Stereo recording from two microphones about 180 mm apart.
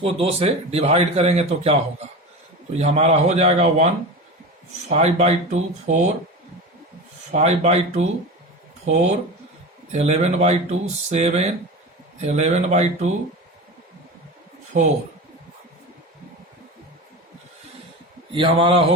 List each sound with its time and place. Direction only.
0.0 s a man's voice: 35° right (ahead or behind)
2.7 s a man's voice: 35° right (ahead or behind)
7.3 s a man's voice: 40° right (ahead or behind)
14.7 s speech: 45° right (ahead or behind)
18.3 s a man's voice: 30° right (ahead or behind)